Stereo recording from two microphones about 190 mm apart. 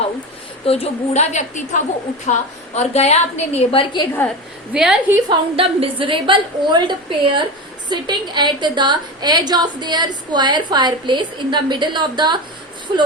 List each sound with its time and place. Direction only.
0.6 s a woman's voice: 30° left (ahead or behind)
4.7 s a woman's voice: 5° right (ahead or behind)
5.1 s a woman's voice: 25° right (ahead or behind)